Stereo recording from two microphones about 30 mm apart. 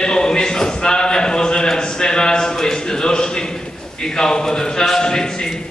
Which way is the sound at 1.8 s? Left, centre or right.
Left.